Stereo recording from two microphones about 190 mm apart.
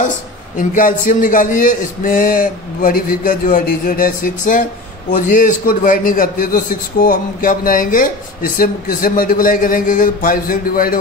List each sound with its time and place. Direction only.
0.6 s a man's voice: 45° left (ahead or behind)